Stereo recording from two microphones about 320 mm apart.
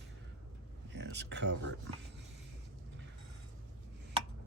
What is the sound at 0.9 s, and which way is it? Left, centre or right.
Speech, right.